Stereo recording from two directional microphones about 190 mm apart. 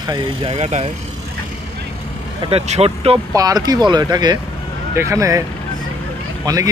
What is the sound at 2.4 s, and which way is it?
Speech, 30° right (ahead or behind).